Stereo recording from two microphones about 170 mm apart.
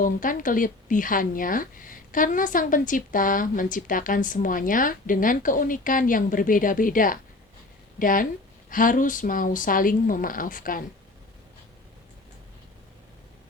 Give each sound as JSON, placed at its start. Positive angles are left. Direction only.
{"t": 0.0, "sound": "a woman's voice", "side_deg": 55}